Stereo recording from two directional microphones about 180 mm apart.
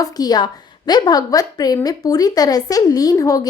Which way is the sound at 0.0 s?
20° left (ahead or behind).